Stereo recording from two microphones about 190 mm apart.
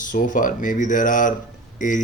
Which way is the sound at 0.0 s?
45° left (ahead or behind).